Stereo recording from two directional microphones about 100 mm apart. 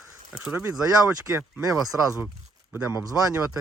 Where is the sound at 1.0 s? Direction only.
20° right (ahead or behind).